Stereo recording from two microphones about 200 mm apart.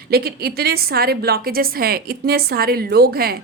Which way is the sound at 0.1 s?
50° right (ahead or behind).